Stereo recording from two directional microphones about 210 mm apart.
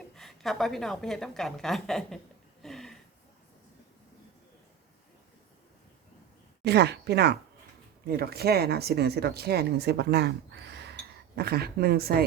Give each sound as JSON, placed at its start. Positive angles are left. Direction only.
{"t": 0.2, "sound": "a woman's voice", "side_deg": 0}
{"t": 6.7, "sound": "speech", "side_deg": -50}